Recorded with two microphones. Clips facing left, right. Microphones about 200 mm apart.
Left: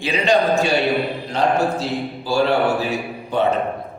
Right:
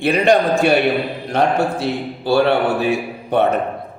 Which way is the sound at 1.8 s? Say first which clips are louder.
Right 3 dB; 60° right (ahead or behind).